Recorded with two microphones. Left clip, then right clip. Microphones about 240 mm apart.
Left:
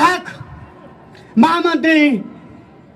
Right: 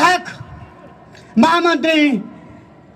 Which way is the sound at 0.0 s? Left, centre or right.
Right.